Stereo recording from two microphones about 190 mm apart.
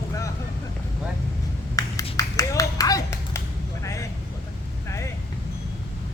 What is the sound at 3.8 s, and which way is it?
Vehicle, 15° left (ahead or behind).